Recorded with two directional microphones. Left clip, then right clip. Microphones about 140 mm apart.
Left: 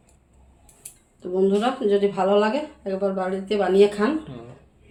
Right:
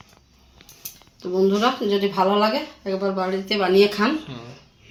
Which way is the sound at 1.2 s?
35° right (ahead or behind).